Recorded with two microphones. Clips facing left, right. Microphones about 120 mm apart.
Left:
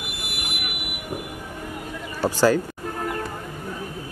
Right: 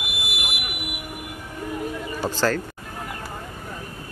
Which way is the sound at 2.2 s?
10° left (ahead or behind).